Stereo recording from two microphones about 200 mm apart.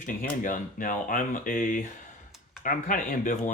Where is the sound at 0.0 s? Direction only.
40° left (ahead or behind).